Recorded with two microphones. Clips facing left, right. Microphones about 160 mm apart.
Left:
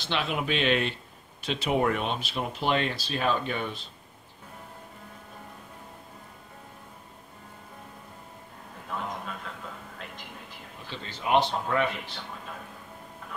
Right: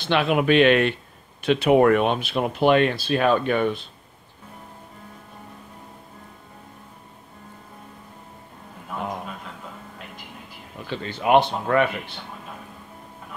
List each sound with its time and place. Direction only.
0.0 s speech: 60° right (ahead or behind)
10.9 s speech: 60° right (ahead or behind)